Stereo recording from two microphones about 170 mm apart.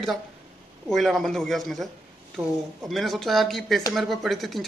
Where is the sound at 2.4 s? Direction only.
15° right (ahead or behind).